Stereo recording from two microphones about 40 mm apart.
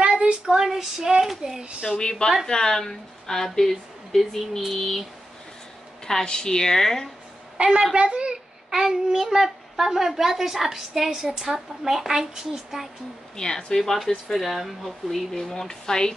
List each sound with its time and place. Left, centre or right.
0.0 s child singing: right
0.5 s a child's voice: centre
1.8 s a woman's voice: left; by 5.0 s centre
6.2 s speech: centre
7.5 s a woman's voice: right
8.6 s a child's voice: centre
11.1 s a woman's voice: right
11.3 s a child's voice: centre
13.4 s speech: centre